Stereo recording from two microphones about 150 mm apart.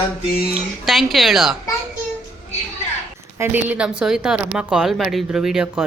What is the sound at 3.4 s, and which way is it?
A woman's voice, 10° right (ahead or behind).